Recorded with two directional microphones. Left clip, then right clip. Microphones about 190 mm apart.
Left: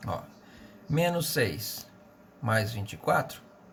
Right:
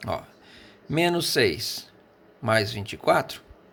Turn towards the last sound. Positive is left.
turn(degrees=-30)  # may be behind; listen again after turning